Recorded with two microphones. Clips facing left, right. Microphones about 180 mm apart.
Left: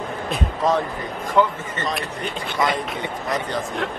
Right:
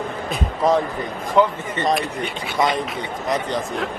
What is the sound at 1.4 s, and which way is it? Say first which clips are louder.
Speech: right 2 dB; 15° right (ahead or behind).